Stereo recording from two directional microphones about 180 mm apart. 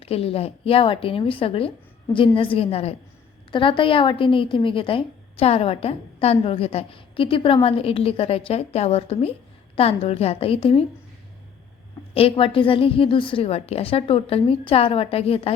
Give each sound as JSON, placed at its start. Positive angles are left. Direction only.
{"t": 0.0, "sound": "a woman's voice", "side_deg": 35}
{"t": 12.1, "sound": "a woman's voice", "side_deg": 30}